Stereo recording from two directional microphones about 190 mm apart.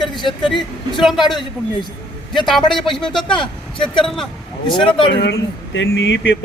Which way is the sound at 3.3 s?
25° left (ahead or behind).